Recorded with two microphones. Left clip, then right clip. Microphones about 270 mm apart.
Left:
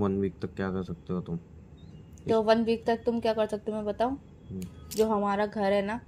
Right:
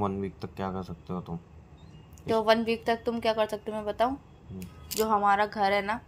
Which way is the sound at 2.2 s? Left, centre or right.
Right.